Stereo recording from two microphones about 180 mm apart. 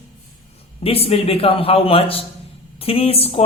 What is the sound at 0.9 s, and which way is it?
A woman's voice, 35° left (ahead or behind).